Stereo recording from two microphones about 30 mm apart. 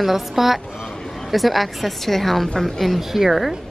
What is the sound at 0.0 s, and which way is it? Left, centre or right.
A woman's voice, centre.